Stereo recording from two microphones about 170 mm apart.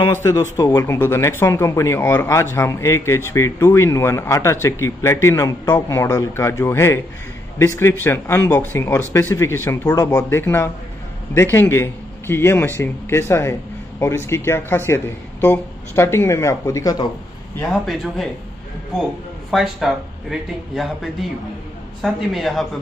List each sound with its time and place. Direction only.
0.1 s speech: 15° left (ahead or behind)
17.8 s speech: centre (ahead or behind)
19.5 s speech: centre (ahead or behind)